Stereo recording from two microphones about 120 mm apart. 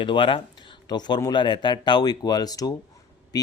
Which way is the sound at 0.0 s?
45° left (ahead or behind).